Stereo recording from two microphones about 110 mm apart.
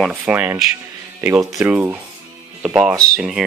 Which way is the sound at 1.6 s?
15° right (ahead or behind).